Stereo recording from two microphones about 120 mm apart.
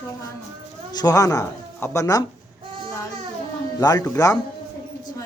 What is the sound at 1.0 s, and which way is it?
Speech, 30° left (ahead or behind).